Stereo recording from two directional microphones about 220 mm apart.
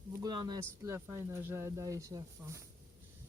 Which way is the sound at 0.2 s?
20° right (ahead or behind).